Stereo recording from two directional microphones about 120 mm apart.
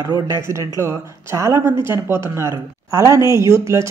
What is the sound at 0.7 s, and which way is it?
A man's voice, 25° right (ahead or behind).